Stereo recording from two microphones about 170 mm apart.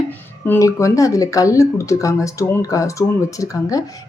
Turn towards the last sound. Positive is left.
turn(degrees=20)  # may be behind; listen again after turning